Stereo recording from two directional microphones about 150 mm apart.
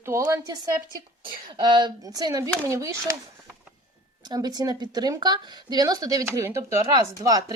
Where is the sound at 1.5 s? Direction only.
30° right (ahead or behind).